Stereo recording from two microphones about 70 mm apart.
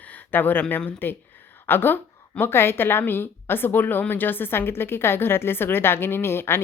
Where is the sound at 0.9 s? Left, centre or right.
Left.